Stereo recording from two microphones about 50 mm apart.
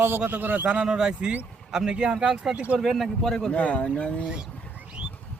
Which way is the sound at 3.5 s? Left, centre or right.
Left.